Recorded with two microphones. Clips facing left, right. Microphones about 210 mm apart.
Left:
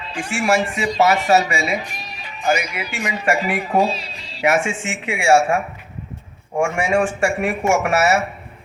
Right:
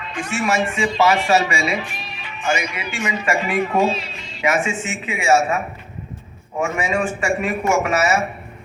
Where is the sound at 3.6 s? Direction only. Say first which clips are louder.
Even; 35° left (ahead or behind).